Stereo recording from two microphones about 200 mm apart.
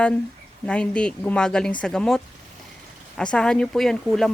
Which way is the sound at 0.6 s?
5° left (ahead or behind).